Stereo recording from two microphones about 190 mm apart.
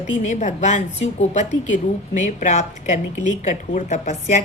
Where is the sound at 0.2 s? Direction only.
40° left (ahead or behind).